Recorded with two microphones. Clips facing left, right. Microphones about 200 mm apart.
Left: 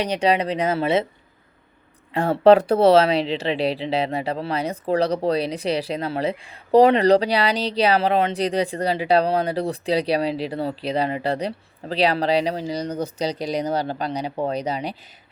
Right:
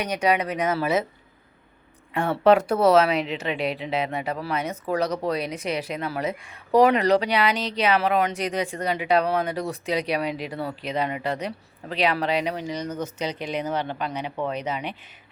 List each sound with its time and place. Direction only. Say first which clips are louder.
0.0 s speech: left 3 dB; 30° left (ahead or behind)
2.1 s speech: left 4 dB; 35° left (ahead or behind)